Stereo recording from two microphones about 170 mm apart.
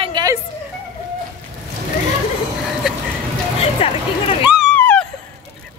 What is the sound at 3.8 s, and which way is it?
Speech, 35° left (ahead or behind).